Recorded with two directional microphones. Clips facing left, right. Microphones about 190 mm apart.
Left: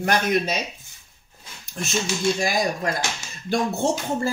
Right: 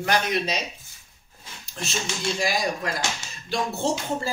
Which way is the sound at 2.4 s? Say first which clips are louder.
Left 2 dB; 50° left (ahead or behind).